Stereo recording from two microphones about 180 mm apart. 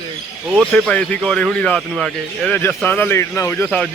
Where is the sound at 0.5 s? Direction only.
Centre (ahead or behind).